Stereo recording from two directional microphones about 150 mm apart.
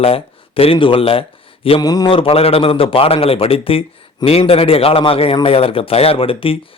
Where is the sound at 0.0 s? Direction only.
40° left (ahead or behind).